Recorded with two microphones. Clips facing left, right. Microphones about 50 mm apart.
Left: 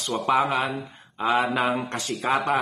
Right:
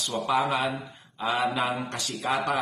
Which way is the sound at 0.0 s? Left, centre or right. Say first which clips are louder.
Left 3 dB; left.